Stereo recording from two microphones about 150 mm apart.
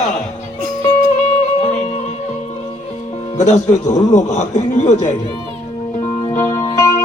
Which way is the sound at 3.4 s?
50° left (ahead or behind).